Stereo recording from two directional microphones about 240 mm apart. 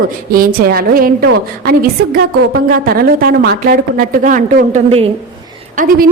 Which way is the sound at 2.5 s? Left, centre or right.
Right.